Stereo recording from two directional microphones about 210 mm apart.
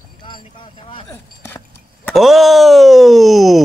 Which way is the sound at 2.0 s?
Centre (ahead or behind).